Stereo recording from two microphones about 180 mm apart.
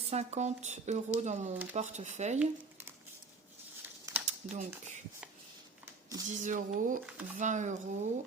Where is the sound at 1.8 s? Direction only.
40° right (ahead or behind).